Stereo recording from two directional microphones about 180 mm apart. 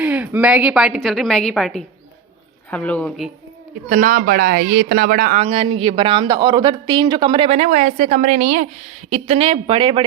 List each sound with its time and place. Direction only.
0.0 s a woman's voice: 10° right (ahead or behind); by 3.2 s 5° left (ahead or behind)
3.8 s speech: 50° right (ahead or behind)
5.4 s speech: 30° right (ahead or behind)